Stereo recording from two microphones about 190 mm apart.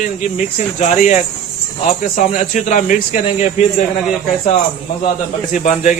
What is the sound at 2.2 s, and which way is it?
Speech, 40° left (ahead or behind).